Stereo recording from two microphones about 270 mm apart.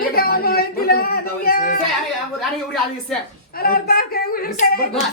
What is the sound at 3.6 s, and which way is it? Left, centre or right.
Speech, left.